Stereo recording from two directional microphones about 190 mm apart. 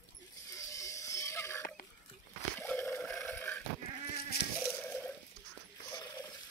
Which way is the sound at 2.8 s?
10° left (ahead or behind).